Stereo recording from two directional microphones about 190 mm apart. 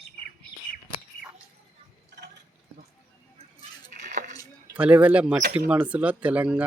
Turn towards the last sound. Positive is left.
turn(degrees=-5)  # may be behind; listen again after turning